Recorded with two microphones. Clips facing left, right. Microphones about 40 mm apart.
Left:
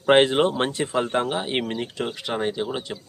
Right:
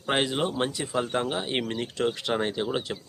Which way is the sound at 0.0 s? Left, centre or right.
Left.